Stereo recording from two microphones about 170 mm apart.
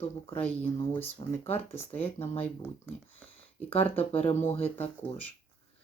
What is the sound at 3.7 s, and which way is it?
Speech, 35° left (ahead or behind).